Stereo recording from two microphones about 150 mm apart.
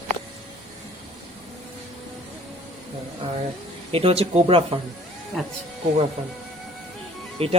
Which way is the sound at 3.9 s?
40° right (ahead or behind).